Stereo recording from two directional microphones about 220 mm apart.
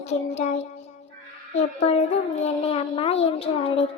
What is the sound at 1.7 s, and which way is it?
Child singing, 30° left (ahead or behind).